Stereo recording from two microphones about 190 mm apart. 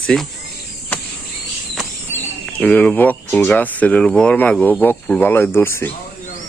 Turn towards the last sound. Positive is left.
turn(degrees=10)  # may be behind; listen again after turning